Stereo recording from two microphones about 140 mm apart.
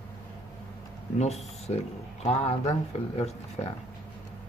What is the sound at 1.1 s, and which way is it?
Speech, 50° left (ahead or behind).